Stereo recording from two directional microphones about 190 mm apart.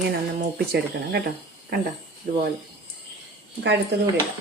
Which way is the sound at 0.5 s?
60° right (ahead or behind).